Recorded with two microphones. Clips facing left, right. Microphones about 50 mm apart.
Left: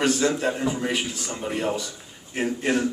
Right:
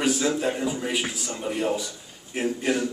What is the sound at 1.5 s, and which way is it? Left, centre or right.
Speech, left.